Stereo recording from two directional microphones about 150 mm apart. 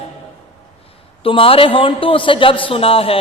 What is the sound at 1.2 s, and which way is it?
A man's voice, 35° left (ahead or behind).